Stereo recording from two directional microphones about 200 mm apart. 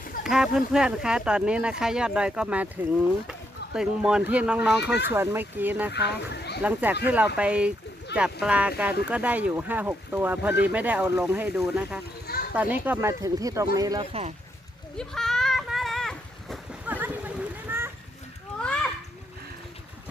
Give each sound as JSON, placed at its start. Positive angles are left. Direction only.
{"t": 0.3, "sound": "speech", "side_deg": 0}
{"t": 5.9, "sound": "speech", "side_deg": 55}
{"t": 6.6, "sound": "speech", "side_deg": -10}
{"t": 14.1, "sound": "speech", "side_deg": -30}
{"t": 14.9, "sound": "a sound", "side_deg": 0}
{"t": 16.8, "sound": "splash", "side_deg": -10}
{"t": 18.6, "sound": "a sound", "side_deg": 5}